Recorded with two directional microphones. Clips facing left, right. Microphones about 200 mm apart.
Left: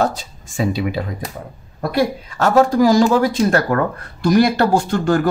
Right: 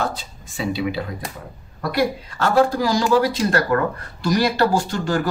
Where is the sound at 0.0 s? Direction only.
45° left (ahead or behind).